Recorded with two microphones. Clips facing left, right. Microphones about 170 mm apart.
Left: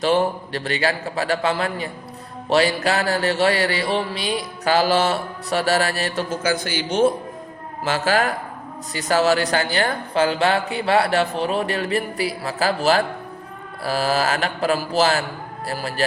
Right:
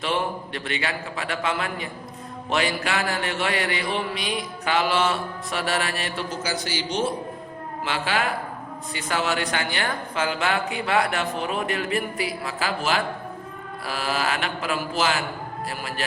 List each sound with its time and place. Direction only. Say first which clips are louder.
0.0 s speech: left 7 dB; 40° left (ahead or behind)
6.4 s speech: left 5 dB; 55° left (ahead or behind)
7.9 s speech: left 6 dB; 40° left (ahead or behind)